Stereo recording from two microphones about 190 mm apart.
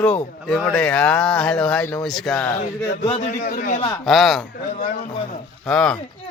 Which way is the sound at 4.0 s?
Centre (ahead or behind).